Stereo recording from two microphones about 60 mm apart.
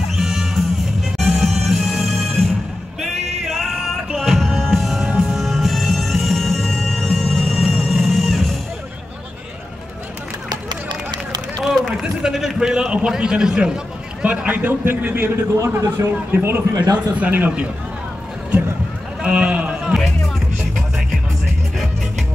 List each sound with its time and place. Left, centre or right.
0.1 s music: centre
12.0 s a sound: centre
14.2 s a man's voice: right
15.2 s a man's voice: right
16.0 s a man's voice: right
16.7 s speech: right
17.2 s a man's voice: right
19.2 s run: right
19.8 s music: centre